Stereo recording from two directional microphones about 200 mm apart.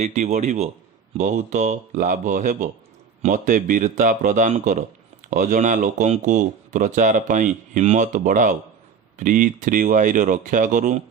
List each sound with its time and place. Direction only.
0.0 s speech: 35° right (ahead or behind)